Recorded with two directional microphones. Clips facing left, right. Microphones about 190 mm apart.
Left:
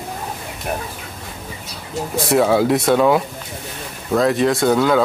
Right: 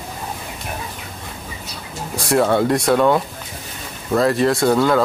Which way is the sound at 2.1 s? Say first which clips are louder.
Left 1 dB; centre (ahead or behind).